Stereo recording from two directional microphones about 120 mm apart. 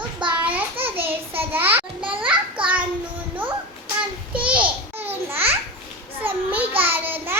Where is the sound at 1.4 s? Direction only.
15° right (ahead or behind).